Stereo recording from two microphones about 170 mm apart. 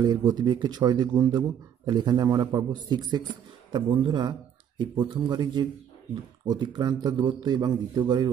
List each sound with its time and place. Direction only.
0.0 s speech: 25° right (ahead or behind)